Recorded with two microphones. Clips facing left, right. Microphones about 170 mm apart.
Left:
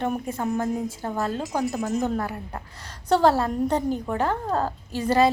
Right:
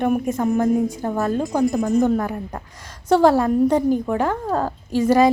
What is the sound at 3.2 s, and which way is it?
A woman's voice, 15° right (ahead or behind).